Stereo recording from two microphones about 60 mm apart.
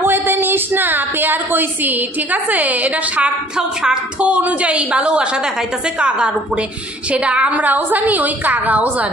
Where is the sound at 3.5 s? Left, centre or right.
Centre.